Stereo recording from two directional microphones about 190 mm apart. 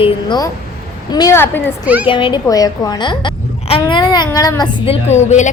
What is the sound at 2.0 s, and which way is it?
A woman's voice, 25° left (ahead or behind).